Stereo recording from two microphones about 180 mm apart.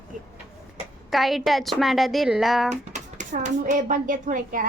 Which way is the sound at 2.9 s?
40° right (ahead or behind).